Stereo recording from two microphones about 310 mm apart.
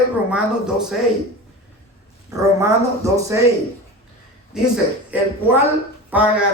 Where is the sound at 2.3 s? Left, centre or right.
Centre.